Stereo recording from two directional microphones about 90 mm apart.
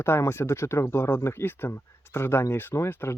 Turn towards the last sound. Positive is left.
turn(degrees=25)  # may be behind; listen again after turning